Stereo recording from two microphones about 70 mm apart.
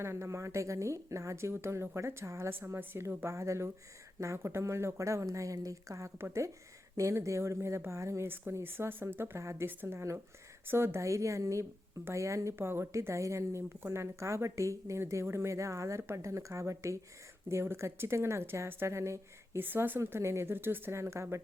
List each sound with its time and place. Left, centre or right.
0.0 s speech: right
3.3 s speech: right
8.6 s speech: right
12.5 s speech: right
19.6 s speech: right
20.0 s speech: right